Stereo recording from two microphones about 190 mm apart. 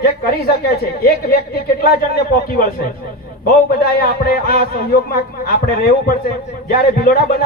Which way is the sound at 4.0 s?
55° left (ahead or behind).